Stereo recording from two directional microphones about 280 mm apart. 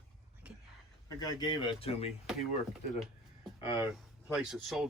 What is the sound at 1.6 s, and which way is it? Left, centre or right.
Speech, left.